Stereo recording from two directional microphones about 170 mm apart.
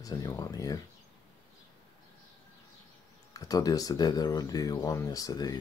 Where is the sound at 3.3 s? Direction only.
20° left (ahead or behind).